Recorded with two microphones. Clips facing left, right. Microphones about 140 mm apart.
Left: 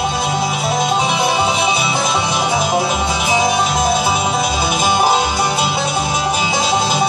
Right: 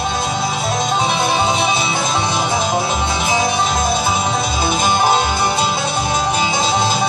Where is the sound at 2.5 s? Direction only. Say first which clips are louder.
Left 2 dB; 10° left (ahead or behind).